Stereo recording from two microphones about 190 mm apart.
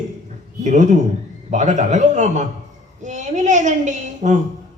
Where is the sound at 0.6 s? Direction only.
40° right (ahead or behind).